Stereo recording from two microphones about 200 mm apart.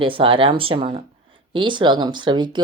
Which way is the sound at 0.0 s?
25° right (ahead or behind).